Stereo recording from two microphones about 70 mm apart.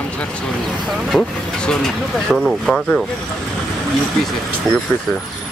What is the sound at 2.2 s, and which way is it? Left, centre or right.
Speech, centre.